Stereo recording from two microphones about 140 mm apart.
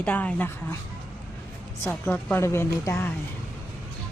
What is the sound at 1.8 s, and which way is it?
Speech, 15° left (ahead or behind).